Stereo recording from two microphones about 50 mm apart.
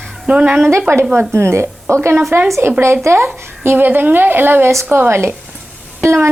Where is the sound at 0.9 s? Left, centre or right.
Right.